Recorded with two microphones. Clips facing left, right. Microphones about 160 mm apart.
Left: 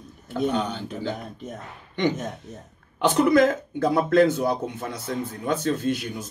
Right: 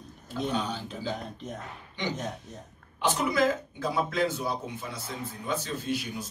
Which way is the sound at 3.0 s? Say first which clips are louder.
Left 8 dB; 60° left (ahead or behind).